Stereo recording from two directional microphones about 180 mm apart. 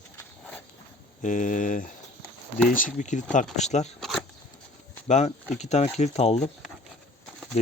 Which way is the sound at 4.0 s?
5° left (ahead or behind).